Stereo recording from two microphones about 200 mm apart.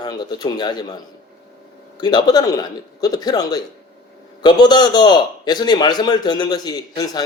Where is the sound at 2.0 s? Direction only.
20° left (ahead or behind).